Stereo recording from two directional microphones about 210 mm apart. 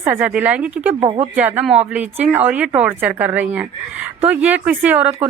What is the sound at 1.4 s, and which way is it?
Speech, 5° right (ahead or behind).